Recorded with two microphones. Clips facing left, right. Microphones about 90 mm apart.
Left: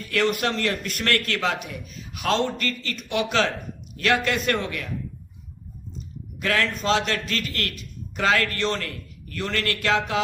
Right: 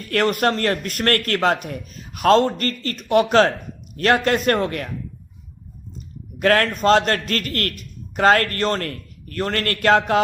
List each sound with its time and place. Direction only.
0.1 s a man's voice: 45° right (ahead or behind)
6.4 s a man's voice: 50° right (ahead or behind)